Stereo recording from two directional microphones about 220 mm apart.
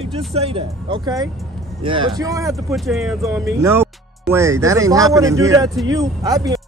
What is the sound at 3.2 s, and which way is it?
Speech, 15° right (ahead or behind).